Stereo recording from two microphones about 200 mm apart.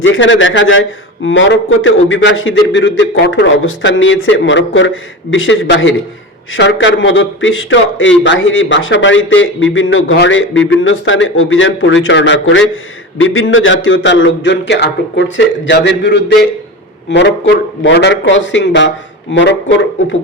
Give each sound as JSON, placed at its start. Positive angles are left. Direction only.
{"t": 0.0, "sound": "a man's voice", "side_deg": 70}